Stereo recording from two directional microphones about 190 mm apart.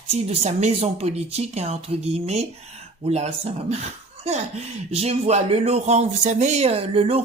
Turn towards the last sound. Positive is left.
turn(degrees=-30)  # may be behind; listen again after turning